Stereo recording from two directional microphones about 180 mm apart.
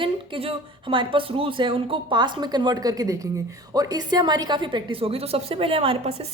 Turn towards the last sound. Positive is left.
turn(degrees=-35)  # may be behind; listen again after turning